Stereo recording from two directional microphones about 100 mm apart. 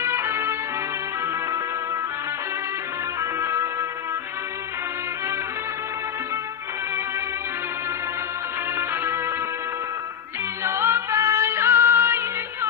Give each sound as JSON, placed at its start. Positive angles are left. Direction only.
{"t": 0.0, "sound": "music", "side_deg": -25}
{"t": 3.2, "sound": "music", "side_deg": -30}
{"t": 10.6, "sound": "music", "side_deg": -25}